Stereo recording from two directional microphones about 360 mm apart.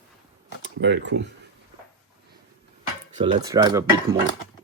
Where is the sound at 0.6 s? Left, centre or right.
Right.